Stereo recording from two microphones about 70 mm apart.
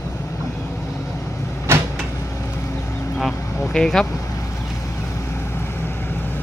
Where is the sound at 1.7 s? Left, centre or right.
Right.